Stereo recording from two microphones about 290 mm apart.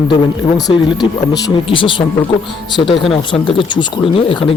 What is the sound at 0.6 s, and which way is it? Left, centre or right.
Speech, centre.